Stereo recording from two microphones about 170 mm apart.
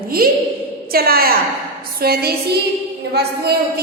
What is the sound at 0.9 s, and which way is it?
A woman's voice, 60° right (ahead or behind).